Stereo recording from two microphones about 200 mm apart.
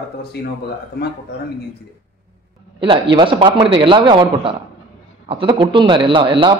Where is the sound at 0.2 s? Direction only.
55° left (ahead or behind).